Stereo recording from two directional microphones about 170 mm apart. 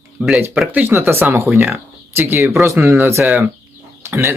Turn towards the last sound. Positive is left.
turn(degrees=-15)  # may be behind; listen again after turning